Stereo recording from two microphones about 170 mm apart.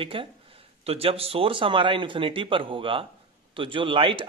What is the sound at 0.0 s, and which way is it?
A man's voice, 30° right (ahead or behind).